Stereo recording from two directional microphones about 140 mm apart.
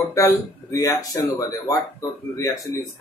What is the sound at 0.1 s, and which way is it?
A man's voice, 20° left (ahead or behind).